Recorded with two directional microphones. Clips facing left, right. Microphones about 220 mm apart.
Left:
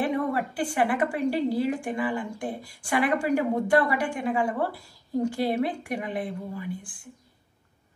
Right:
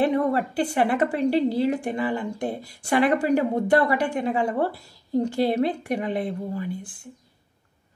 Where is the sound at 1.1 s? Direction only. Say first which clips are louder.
Right 4 dB; 25° right (ahead or behind).